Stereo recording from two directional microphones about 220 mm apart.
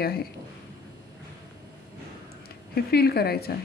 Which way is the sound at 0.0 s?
45° left (ahead or behind).